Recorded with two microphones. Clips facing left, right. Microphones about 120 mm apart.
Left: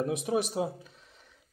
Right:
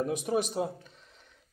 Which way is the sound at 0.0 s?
Centre (ahead or behind).